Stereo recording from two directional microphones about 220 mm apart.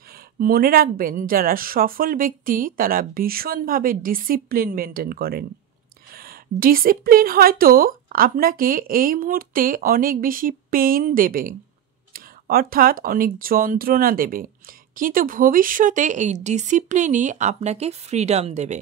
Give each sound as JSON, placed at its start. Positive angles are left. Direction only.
{"t": 0.1, "sound": "a woman's voice", "side_deg": -40}